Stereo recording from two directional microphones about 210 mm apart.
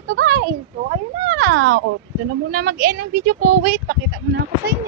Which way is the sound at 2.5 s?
45° right (ahead or behind).